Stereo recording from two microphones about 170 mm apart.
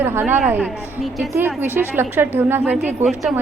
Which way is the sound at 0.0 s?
10° right (ahead or behind).